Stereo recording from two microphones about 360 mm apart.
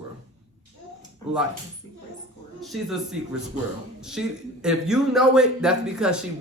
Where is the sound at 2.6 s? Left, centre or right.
Centre.